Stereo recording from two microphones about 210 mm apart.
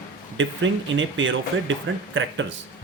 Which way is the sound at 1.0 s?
65° right (ahead or behind).